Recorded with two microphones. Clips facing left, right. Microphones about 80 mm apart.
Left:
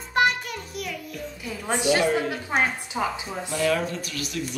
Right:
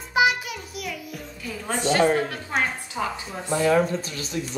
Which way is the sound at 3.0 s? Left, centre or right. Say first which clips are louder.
Left 1 dB; centre.